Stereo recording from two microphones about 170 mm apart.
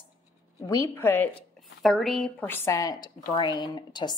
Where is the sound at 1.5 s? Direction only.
Centre (ahead or behind).